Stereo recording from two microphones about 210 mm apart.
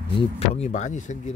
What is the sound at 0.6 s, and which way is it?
Speech, 35° left (ahead or behind).